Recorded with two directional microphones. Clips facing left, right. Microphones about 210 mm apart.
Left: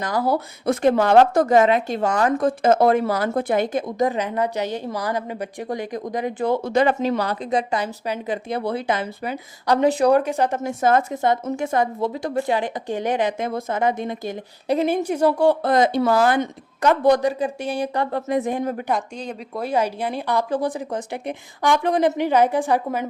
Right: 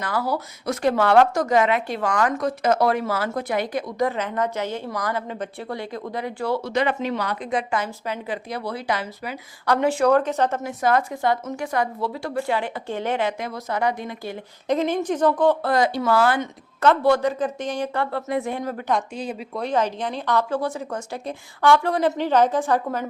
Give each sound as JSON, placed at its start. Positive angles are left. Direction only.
{"t": 0.3, "sound": "speech", "side_deg": 55}
{"t": 0.7, "sound": "speech", "side_deg": 25}
{"t": 1.3, "sound": "speech", "side_deg": 55}
{"t": 2.0, "sound": "speech", "side_deg": 25}
{"t": 3.1, "sound": "speech", "side_deg": 40}
{"t": 4.0, "sound": "a woman's voice", "side_deg": 15}
{"t": 6.5, "sound": "speech", "side_deg": 50}
{"t": 8.0, "sound": "a woman's voice", "side_deg": 15}
{"t": 10.7, "sound": "speech", "side_deg": 25}
{"t": 14.2, "sound": "speech", "side_deg": 45}
{"t": 14.8, "sound": "a woman's voice", "side_deg": 10}
{"t": 18.9, "sound": "a woman's voice", "side_deg": -5}